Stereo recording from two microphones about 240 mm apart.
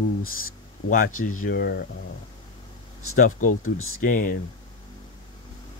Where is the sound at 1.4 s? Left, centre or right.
Left.